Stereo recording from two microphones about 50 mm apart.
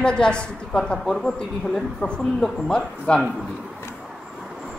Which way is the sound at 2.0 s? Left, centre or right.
Centre.